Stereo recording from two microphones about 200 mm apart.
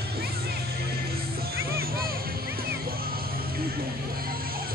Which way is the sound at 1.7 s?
50° right (ahead or behind).